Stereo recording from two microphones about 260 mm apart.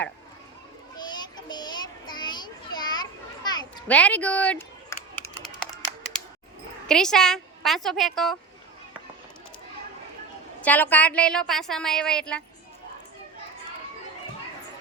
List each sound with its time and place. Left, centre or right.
0.9 s children playing: centre
3.8 s typing: centre
6.8 s a woman's voice: centre
10.6 s a woman's voice: centre